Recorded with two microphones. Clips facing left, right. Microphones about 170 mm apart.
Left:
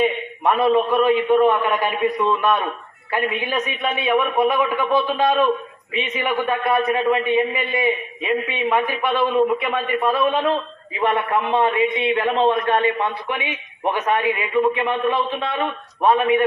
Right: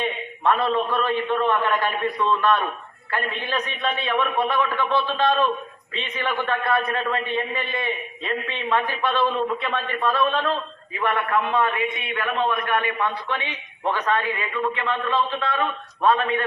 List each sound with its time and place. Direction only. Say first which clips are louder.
0.6 s a man's voice: left 6 dB; 15° left (ahead or behind)
13.2 s speech: left 3 dB; 15° left (ahead or behind)